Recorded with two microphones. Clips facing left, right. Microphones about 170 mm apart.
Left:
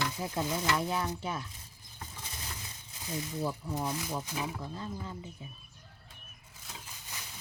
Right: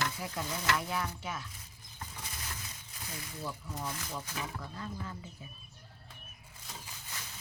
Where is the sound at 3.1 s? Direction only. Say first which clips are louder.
Left 8 dB; 25° left (ahead or behind).